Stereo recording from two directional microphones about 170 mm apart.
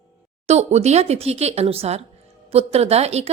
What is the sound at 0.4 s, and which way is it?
A woman's voice, 40° right (ahead or behind).